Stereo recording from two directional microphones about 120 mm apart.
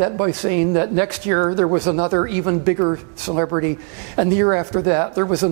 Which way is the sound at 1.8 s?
25° right (ahead or behind).